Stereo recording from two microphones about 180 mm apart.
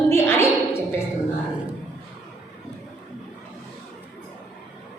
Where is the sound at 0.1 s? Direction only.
15° left (ahead or behind).